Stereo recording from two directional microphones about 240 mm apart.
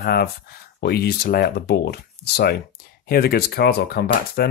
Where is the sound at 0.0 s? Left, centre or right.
Left.